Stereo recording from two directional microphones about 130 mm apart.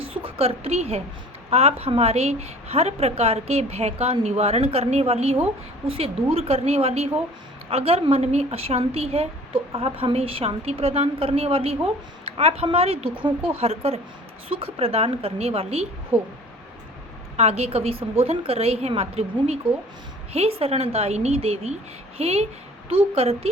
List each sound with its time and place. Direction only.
0.0 s a woman's voice: 45° right (ahead or behind)
16.1 s speech: 15° right (ahead or behind)
17.3 s a woman's voice: 55° right (ahead or behind)